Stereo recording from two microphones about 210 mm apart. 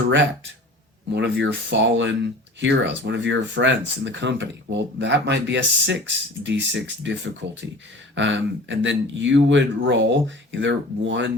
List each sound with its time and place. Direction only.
1.1 s speech: 55° right (ahead or behind)